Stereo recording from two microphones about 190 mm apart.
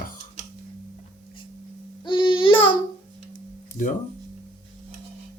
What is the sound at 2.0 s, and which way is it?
Child singing, 25° left (ahead or behind).